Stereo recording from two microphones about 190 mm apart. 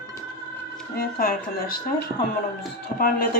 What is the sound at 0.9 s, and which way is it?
Speech, 50° left (ahead or behind).